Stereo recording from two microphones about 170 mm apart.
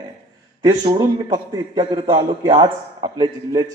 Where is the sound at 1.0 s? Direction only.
25° right (ahead or behind).